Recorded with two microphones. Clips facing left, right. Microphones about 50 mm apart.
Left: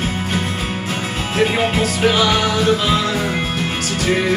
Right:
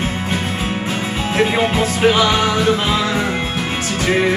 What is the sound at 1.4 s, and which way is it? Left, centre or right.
Music, centre.